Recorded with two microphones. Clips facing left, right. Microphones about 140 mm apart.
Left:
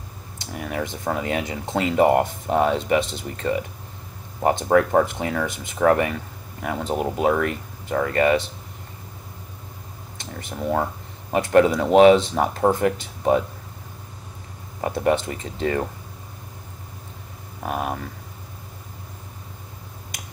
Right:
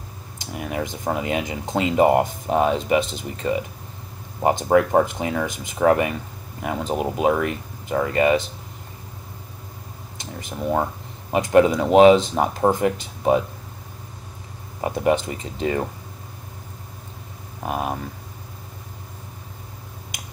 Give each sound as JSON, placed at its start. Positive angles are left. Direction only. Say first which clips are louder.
{"t": 0.5, "sound": "speech", "louder": "right 1 dB", "side_deg": -20}
{"t": 11.3, "sound": "speech", "louder": "right 1 dB", "side_deg": -20}
{"t": 14.8, "sound": "speech", "louder": "right 1 dB", "side_deg": -15}
{"t": 17.6, "sound": "speech", "louder": "right 1 dB", "side_deg": -25}